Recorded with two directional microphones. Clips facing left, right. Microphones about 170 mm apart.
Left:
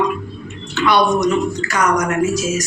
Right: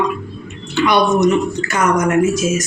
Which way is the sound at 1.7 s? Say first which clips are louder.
Right 3 dB; 20° right (ahead or behind).